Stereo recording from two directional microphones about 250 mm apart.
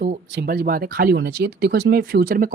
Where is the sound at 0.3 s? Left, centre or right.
Right.